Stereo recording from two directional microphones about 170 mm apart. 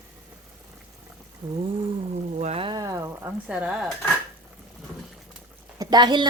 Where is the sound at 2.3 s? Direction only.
40° right (ahead or behind); by 3.9 s 5° right (ahead or behind).